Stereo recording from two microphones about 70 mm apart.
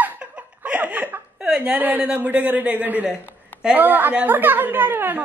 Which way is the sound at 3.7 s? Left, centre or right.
Right.